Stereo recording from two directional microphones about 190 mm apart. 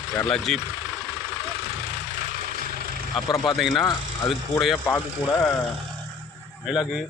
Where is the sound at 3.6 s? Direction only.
Centre (ahead or behind).